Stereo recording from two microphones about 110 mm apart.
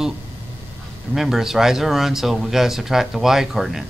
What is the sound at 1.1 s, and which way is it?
Speech, 5° right (ahead or behind).